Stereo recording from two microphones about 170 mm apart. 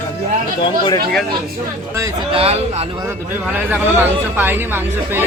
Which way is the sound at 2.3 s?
35° right (ahead or behind).